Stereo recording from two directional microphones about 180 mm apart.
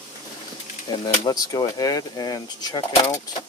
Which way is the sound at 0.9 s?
25° left (ahead or behind).